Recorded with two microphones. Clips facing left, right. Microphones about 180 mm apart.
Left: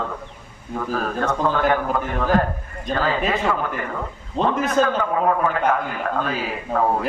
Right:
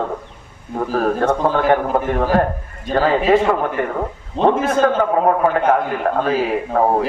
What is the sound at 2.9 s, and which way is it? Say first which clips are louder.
Speech: right 6 dB; 35° right (ahead or behind).